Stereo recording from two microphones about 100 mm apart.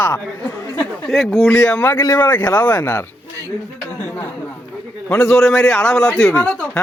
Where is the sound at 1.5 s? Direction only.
20° left (ahead or behind).